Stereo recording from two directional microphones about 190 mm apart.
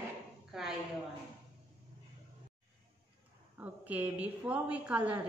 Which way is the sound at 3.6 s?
10° right (ahead or behind).